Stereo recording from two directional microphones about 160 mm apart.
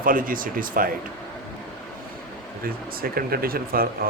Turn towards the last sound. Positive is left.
turn(degrees=-65)  # may be behind; listen again after turning